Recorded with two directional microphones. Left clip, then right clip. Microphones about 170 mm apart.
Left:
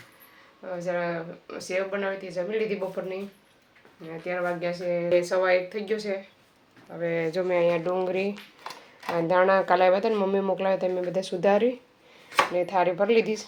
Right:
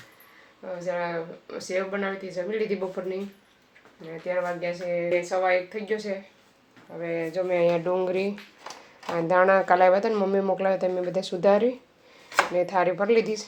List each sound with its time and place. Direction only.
0.9 s speech: centre (ahead or behind)
5.0 s speech: 20° left (ahead or behind)
7.2 s speech: 60° left (ahead or behind)
7.5 s speech: 5° left (ahead or behind)